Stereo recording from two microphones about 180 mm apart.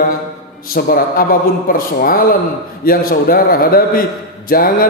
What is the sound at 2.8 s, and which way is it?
A man's voice, 55° left (ahead or behind).